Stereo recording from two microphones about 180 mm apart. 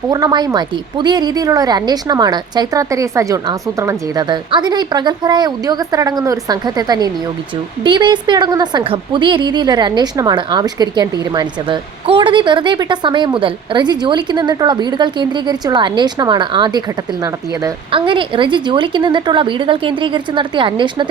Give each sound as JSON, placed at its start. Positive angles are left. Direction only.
{"t": 0.1, "sound": "a woman's voice", "side_deg": -20}